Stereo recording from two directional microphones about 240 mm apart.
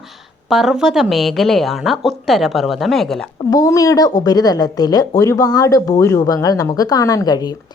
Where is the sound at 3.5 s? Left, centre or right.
Centre.